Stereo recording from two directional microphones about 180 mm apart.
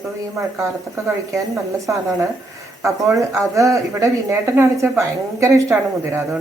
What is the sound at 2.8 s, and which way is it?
Speech, 15° right (ahead or behind).